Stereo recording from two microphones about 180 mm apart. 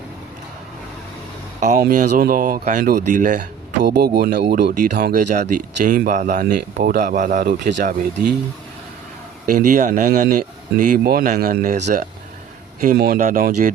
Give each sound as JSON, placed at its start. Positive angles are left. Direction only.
{"t": 1.8, "sound": "speech", "side_deg": -50}
{"t": 3.8, "sound": "speech", "side_deg": -60}
{"t": 5.3, "sound": "speech", "side_deg": -45}
{"t": 9.5, "sound": "speech", "side_deg": -45}